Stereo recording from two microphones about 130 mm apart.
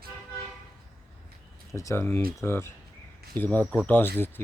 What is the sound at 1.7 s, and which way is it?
Speech, 20° left (ahead or behind).